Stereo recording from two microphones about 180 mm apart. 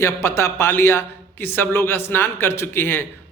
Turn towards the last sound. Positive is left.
turn(degrees=10)  # may be behind; listen again after turning